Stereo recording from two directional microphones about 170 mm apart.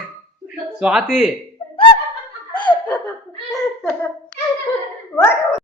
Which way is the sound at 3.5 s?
5° left (ahead or behind).